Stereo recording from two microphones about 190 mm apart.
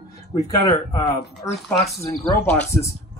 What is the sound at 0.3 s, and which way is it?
Speech, 15° left (ahead or behind).